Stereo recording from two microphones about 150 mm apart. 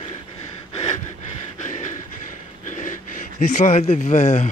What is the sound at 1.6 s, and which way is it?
Train, 50° left (ahead or behind).